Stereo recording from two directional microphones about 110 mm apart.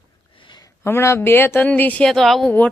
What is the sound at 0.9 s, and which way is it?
Speech, 20° left (ahead or behind).